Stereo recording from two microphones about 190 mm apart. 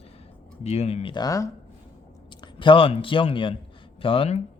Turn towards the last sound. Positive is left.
turn(degrees=30)  # may be behind; listen again after turning